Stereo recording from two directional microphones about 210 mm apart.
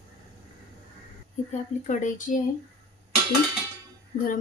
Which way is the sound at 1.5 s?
35° left (ahead or behind).